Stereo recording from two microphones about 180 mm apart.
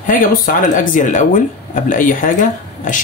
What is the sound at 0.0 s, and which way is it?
Speech, 50° left (ahead or behind).